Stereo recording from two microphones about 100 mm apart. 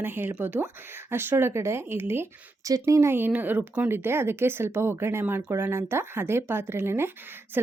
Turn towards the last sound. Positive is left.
turn(degrees=-20)  # may be behind; listen again after turning